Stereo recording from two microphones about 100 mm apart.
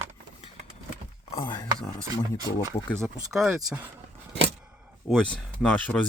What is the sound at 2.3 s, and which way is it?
Speech, 40° right (ahead or behind).